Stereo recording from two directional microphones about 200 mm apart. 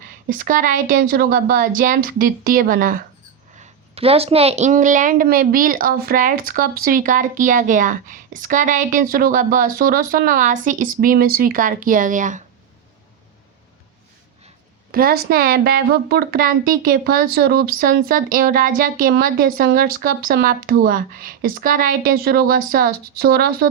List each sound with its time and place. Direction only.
0.3 s a woman's voice: 45° right (ahead or behind)
3.6 s a woman's voice: 30° right (ahead or behind)
14.9 s a woman's voice: 50° right (ahead or behind)